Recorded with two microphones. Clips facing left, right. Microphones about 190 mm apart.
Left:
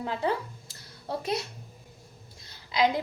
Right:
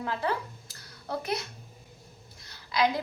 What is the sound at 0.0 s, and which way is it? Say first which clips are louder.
Speech: left 2 dB; 20° left (ahead or behind).